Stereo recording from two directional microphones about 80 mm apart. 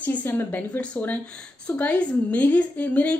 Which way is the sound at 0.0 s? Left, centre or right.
Left.